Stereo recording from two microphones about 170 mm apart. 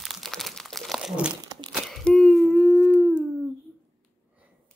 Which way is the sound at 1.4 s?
20° right (ahead or behind).